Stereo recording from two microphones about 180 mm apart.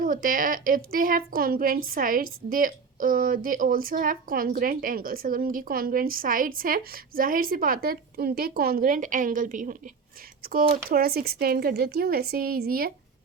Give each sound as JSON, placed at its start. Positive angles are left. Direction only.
{"t": 0.0, "sound": "a woman's voice", "side_deg": -50}